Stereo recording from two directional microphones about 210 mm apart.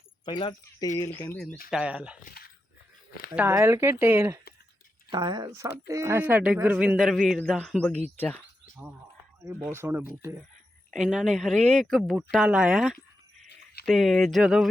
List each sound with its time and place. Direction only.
0.3 s speech: 25° left (ahead or behind)
0.9 s speech: 15° left (ahead or behind)
1.7 s speech: 5° right (ahead or behind)
2.4 s dog: 50° left (ahead or behind)
3.3 s speech: 10° right (ahead or behind)
7.9 s speech: 30° right (ahead or behind)
9.4 s speech: 15° right (ahead or behind)
10.9 s speech: centre (ahead or behind)